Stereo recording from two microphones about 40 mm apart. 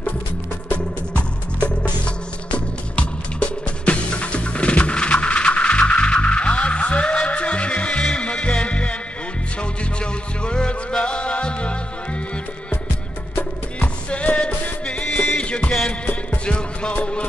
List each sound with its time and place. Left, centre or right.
0.7 s music: left
10.4 s music: left
14.1 s music: left